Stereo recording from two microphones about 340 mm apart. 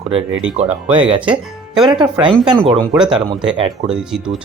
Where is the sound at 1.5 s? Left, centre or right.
Centre.